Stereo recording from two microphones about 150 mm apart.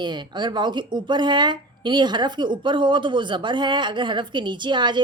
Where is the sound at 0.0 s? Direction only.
30° right (ahead or behind).